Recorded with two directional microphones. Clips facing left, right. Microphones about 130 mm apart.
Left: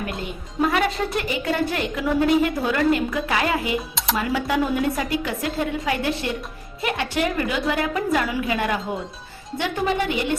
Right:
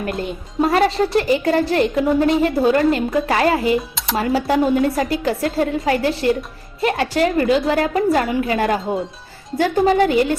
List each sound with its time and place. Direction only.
0.6 s a woman's voice: 35° right (ahead or behind)
3.9 s music: centre (ahead or behind)
4.2 s a woman's voice: 35° right (ahead or behind)